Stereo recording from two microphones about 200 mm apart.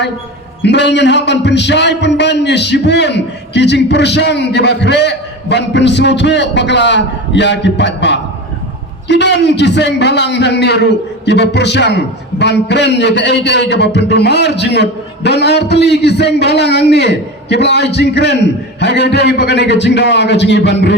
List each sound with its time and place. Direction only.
0.6 s a man's voice: 60° left (ahead or behind)